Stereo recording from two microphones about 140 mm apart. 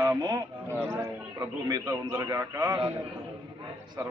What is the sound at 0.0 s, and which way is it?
Speech, 25° right (ahead or behind).